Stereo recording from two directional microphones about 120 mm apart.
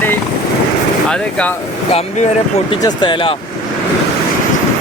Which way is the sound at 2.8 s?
40° left (ahead or behind).